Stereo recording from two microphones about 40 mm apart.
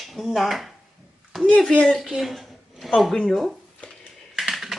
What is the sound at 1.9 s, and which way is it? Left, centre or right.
A woman's voice, centre.